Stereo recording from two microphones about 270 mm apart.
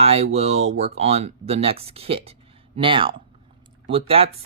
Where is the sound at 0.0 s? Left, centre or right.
Right.